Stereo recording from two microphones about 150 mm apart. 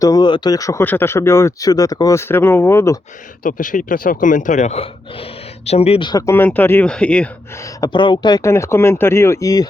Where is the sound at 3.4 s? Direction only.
60° left (ahead or behind); by 6.1 s 45° left (ahead or behind).